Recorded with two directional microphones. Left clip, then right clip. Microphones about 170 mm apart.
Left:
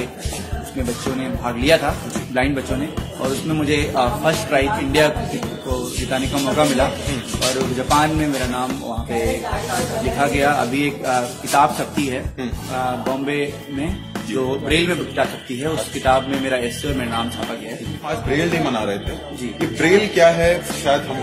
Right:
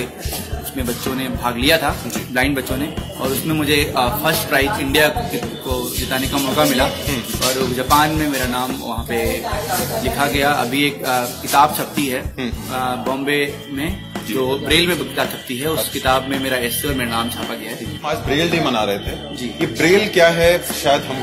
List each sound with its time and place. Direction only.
1.4 s a man's voice: centre (ahead or behind)
10.1 s a man's voice: centre (ahead or behind)
18.0 s music: 30° right (ahead or behind)